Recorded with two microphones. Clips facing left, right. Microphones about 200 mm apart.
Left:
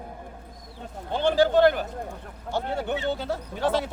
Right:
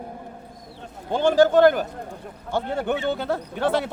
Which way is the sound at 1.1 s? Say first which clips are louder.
Right 4 dB; 45° right (ahead or behind).